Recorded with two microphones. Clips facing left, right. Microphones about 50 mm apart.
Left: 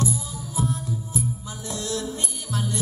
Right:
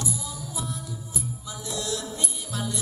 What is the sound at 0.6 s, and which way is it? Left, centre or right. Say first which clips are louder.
Music: left 10 dB; left.